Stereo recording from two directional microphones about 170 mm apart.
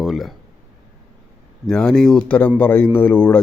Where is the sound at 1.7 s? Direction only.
5° left (ahead or behind).